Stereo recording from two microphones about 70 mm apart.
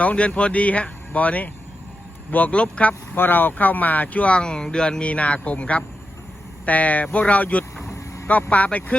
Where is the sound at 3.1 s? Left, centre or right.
Left.